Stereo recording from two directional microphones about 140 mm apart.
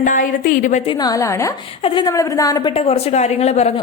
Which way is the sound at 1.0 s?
25° left (ahead or behind).